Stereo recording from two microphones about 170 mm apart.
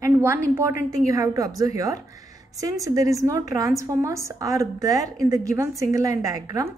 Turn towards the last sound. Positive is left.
turn(degrees=-20)  # may be behind; listen again after turning